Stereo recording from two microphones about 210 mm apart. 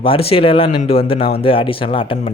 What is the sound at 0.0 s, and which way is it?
A man's voice, 25° left (ahead or behind).